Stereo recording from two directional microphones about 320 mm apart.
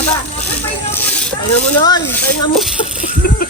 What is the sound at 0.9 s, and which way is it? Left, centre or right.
Snake, centre.